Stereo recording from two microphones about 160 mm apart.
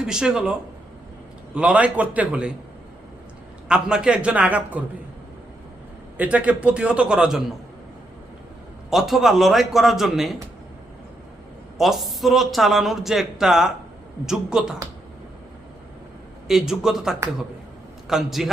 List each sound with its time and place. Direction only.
0.0 s speech: 5° right (ahead or behind)
1.5 s a man's voice: 5° right (ahead or behind)
3.7 s a man's voice: 5° right (ahead or behind)
6.1 s a man's voice: 10° right (ahead or behind)
8.9 s speech: centre (ahead or behind)
11.8 s speech: centre (ahead or behind)
16.5 s speech: centre (ahead or behind)